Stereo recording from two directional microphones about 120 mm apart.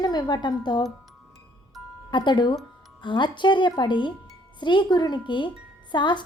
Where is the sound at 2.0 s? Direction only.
40° left (ahead or behind).